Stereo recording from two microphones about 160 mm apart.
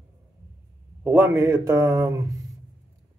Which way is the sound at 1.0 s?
15° right (ahead or behind).